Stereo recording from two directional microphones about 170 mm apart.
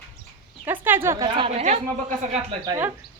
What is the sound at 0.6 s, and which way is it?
Speech, 10° right (ahead or behind).